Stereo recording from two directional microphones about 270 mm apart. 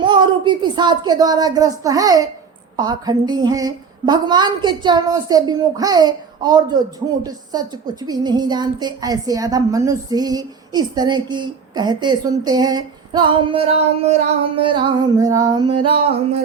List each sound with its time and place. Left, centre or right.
0.0 s a woman's voice: centre
15.8 s music: right